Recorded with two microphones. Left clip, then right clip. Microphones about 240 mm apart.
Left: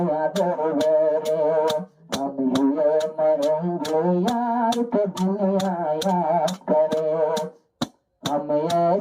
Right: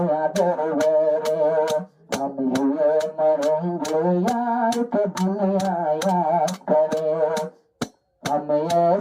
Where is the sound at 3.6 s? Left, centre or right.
Right.